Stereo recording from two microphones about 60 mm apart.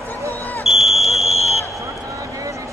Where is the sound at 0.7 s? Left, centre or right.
Centre.